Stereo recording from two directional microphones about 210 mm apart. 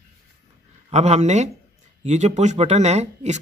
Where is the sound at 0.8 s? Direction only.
30° right (ahead or behind).